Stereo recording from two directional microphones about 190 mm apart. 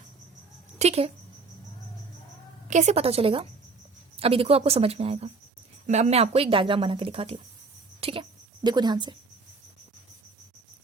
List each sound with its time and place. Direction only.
0.8 s speech: 35° right (ahead or behind)
2.6 s a woman's voice: 40° right (ahead or behind); by 9.1 s 25° right (ahead or behind)